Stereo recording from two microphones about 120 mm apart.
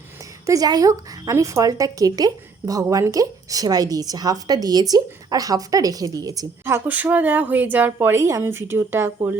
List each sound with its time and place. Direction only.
0.4 s a woman's voice: 30° right (ahead or behind)
6.7 s a woman's voice: 15° right (ahead or behind)